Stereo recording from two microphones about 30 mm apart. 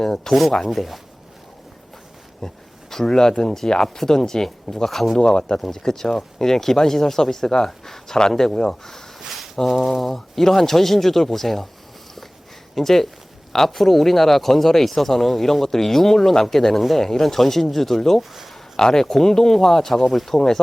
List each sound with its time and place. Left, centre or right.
0.0 s speech: centre
0.7 s speech: centre
2.4 s speech: centre
4.4 s speech: centre
5.1 s speech: left
5.7 s speech: centre
9.6 s speech: centre
12.7 s speech: centre
18.2 s speech: centre
18.8 s speech: centre